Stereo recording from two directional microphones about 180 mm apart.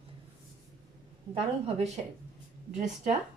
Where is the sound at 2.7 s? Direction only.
40° right (ahead or behind).